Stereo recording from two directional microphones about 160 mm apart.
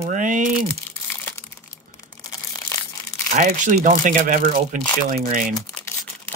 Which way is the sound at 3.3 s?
50° right (ahead or behind).